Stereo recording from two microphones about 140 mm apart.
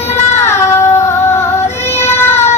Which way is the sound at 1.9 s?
15° left (ahead or behind).